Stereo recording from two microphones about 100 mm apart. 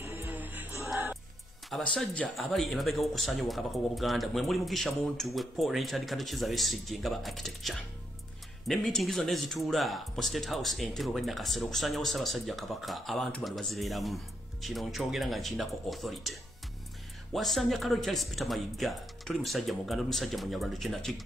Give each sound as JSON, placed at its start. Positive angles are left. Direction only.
{"t": 0.0, "sound": "music", "side_deg": -20}
{"t": 1.7, "sound": "speech", "side_deg": 5}